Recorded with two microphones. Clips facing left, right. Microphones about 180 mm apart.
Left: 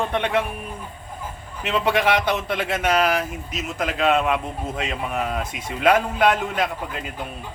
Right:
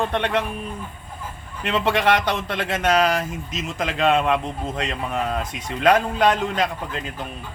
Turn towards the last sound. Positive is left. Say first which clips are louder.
# right 1 dB
turn(degrees=10)  # may be behind; listen again after turning